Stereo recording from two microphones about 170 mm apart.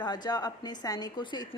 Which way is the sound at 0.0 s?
25° left (ahead or behind).